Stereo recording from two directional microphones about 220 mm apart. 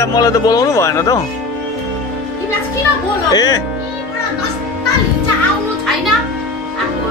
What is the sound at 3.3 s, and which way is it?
Speech, 15° left (ahead or behind).